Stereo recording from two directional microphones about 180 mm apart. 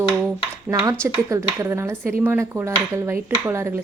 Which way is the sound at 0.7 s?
10° right (ahead or behind).